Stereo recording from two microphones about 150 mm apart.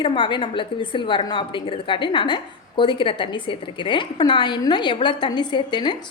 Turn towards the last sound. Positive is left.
turn(degrees=30)  # may be behind; listen again after turning